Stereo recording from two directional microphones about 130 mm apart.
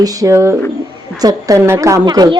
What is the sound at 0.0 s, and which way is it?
A woman's voice, 25° right (ahead or behind).